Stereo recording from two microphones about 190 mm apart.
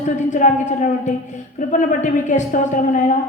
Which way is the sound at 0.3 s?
40° left (ahead or behind).